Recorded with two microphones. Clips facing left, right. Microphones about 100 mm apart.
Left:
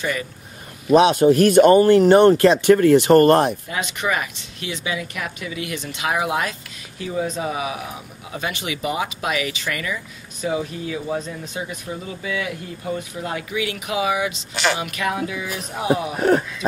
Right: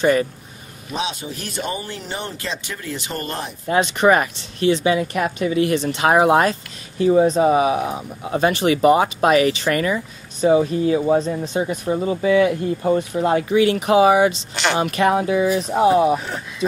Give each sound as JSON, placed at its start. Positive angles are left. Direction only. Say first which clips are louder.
{"t": 0.0, "sound": "speech", "louder": "right 9 dB", "side_deg": -40}
{"t": 0.9, "sound": "speech", "louder": "left 14 dB", "side_deg": 60}
{"t": 3.6, "sound": "speech", "louder": "right 9 dB", "side_deg": -40}
{"t": 14.5, "sound": "speech", "louder": "right 1 dB", "side_deg": 0}
{"t": 14.8, "sound": "speech", "louder": "right 7 dB", "side_deg": -40}
{"t": 16.2, "sound": "speech", "louder": "left 12 dB", "side_deg": 60}